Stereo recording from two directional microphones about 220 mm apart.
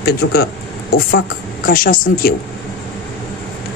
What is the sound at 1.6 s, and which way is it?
Speech, 40° left (ahead or behind).